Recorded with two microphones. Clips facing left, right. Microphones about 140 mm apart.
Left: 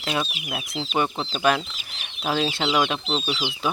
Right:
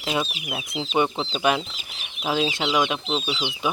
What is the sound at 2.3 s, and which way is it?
Speech, 10° right (ahead or behind).